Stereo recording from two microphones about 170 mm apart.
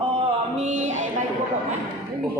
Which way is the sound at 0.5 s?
45° right (ahead or behind).